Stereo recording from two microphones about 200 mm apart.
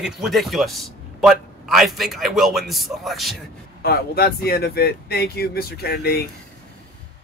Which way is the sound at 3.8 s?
50° left (ahead or behind).